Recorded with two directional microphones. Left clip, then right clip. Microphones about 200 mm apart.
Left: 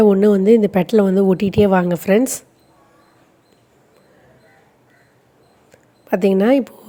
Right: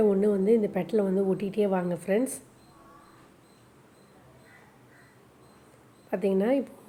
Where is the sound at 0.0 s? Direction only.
45° left (ahead or behind).